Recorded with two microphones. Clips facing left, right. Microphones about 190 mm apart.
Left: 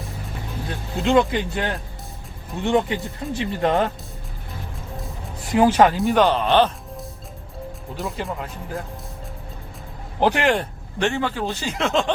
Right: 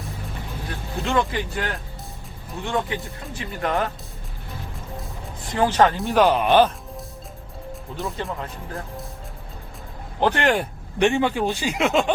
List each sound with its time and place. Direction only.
0.9 s speech: 20° left (ahead or behind)
5.5 s speech: 10° left (ahead or behind)
6.0 s speech: centre (ahead or behind)
6.3 s speech: 10° right (ahead or behind)
7.9 s speech: centre (ahead or behind)
10.2 s speech: 10° left (ahead or behind)
11.0 s speech: 15° right (ahead or behind)